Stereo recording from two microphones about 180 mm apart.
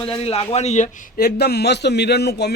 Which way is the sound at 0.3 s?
35° left (ahead or behind).